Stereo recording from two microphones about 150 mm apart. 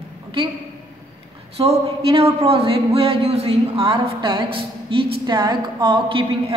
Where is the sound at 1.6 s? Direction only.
40° right (ahead or behind).